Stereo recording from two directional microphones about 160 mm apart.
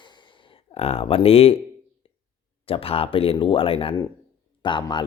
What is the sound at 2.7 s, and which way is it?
Speech, 35° left (ahead or behind).